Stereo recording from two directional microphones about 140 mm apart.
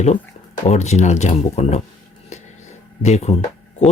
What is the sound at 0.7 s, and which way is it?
Speech, 55° left (ahead or behind).